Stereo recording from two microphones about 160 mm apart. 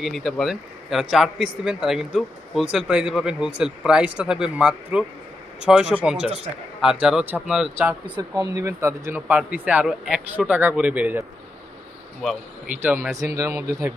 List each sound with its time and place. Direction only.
0.0 s a man's voice: centre (ahead or behind)
8.2 s speech: 20° right (ahead or behind)
12.2 s speech: centre (ahead or behind)
12.8 s speech: 15° right (ahead or behind)